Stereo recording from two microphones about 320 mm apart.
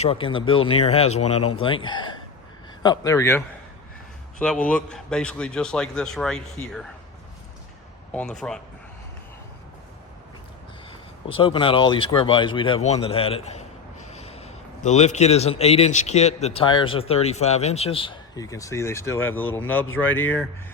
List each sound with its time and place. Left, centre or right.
0.0 s a man's voice: centre
8.1 s a man's voice: centre
11.3 s a man's voice: centre